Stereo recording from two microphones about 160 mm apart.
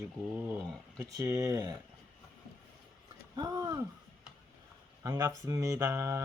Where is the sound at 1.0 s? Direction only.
20° right (ahead or behind).